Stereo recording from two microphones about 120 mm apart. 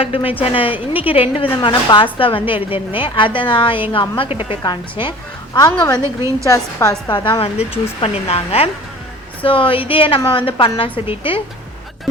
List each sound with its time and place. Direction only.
0.0 s a woman's voice: 50° left (ahead or behind)
6.0 s a woman's voice: 25° right (ahead or behind)
6.5 s a woman's voice: 25° left (ahead or behind)
7.1 s a woman's voice: 45° left (ahead or behind)